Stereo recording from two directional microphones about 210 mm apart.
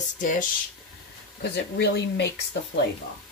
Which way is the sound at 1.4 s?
55° left (ahead or behind).